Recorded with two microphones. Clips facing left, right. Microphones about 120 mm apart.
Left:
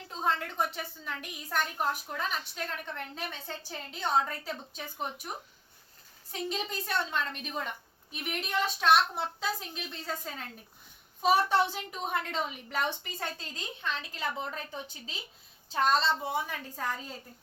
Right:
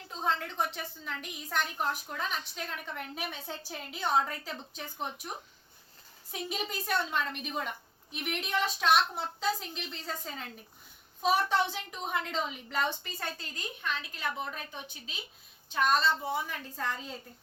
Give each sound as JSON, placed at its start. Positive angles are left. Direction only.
{"t": 0.1, "sound": "a woman's voice", "side_deg": 5}
{"t": 2.9, "sound": "a woman's voice", "side_deg": -10}
{"t": 6.3, "sound": "a woman's voice", "side_deg": -5}
{"t": 16.7, "sound": "a woman's voice", "side_deg": 10}